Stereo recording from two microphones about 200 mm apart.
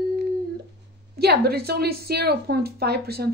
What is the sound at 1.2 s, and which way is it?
A woman's voice, 50° right (ahead or behind).